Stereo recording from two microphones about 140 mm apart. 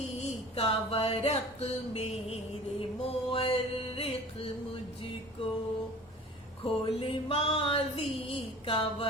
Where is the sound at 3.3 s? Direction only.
40° left (ahead or behind).